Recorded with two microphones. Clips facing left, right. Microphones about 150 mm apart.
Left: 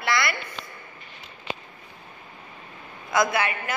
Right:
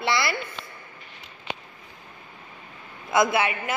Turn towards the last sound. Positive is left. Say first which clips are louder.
# right 2 dB
turn(degrees=-25)  # may be behind; listen again after turning